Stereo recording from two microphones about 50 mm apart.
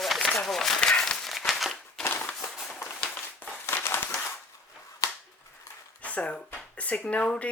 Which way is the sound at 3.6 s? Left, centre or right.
Left.